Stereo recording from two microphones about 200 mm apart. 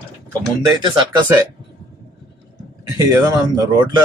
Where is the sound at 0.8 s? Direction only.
20° right (ahead or behind).